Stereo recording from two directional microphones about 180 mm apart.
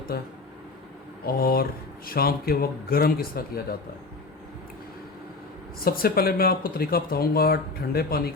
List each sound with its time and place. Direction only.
1.4 s speech: 55° left (ahead or behind)
5.8 s speech: 55° left (ahead or behind)